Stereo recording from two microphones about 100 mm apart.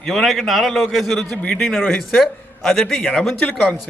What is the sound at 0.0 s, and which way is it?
A man's voice, centre (ahead or behind).